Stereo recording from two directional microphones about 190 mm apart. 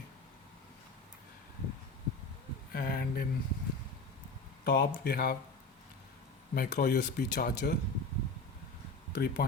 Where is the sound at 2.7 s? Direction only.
50° left (ahead or behind).